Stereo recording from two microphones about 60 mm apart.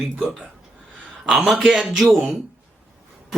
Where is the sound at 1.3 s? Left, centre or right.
Centre.